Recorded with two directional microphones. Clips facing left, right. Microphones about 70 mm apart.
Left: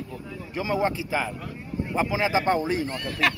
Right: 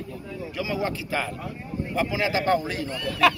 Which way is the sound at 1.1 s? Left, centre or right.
Centre.